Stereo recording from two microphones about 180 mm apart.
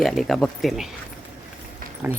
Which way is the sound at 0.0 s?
Centre (ahead or behind).